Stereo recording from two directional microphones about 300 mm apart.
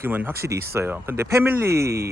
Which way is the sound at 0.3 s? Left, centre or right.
Right.